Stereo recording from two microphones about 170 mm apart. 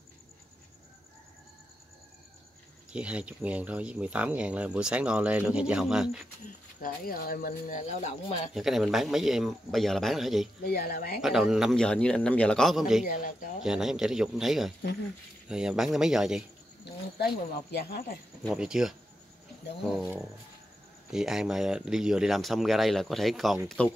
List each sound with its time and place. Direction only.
2.9 s speech: 5° right (ahead or behind)
6.8 s speech: 60° left (ahead or behind); by 8.4 s 40° left (ahead or behind)
8.5 s speech: centre (ahead or behind)
10.6 s speech: 60° left (ahead or behind)
11.1 s speech: centre (ahead or behind)
13.0 s speech: 55° left (ahead or behind)
13.6 s speech: 5° right (ahead or behind)
17.2 s speech: 75° left (ahead or behind)
18.5 s speech: 5° right (ahead or behind)
21.1 s speech: 5° right (ahead or behind)